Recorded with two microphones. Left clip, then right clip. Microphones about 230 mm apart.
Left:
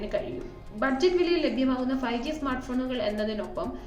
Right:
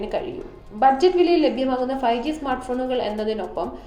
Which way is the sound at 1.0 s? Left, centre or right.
Left.